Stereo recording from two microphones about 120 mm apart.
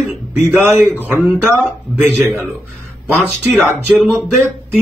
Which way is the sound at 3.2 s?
5° right (ahead or behind).